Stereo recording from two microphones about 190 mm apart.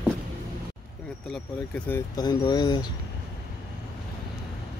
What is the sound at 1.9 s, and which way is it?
Speech, 15° left (ahead or behind).